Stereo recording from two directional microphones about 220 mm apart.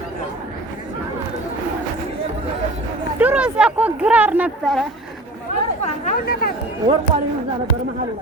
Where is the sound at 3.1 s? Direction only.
5° right (ahead or behind).